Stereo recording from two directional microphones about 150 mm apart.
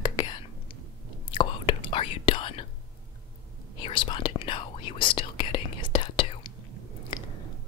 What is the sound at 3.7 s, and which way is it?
Whispering, 35° left (ahead or behind).